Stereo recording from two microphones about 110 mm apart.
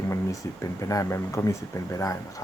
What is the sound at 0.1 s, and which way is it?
Speech, 30° left (ahead or behind).